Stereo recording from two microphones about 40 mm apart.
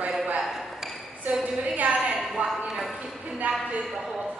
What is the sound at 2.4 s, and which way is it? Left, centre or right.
Clip-clop, right.